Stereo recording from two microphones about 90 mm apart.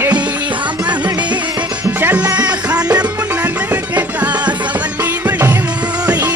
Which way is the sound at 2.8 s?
45° right (ahead or behind).